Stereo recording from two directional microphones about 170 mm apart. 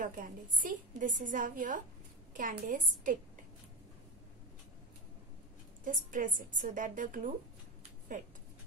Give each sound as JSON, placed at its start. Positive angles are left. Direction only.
{"t": 0.0, "sound": "a woman's voice", "side_deg": -50}
{"t": 5.9, "sound": "a woman's voice", "side_deg": -50}